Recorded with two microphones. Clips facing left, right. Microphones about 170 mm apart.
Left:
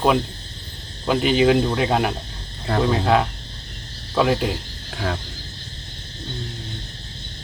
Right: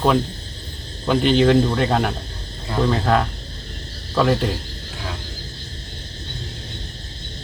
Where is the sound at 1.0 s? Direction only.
5° left (ahead or behind).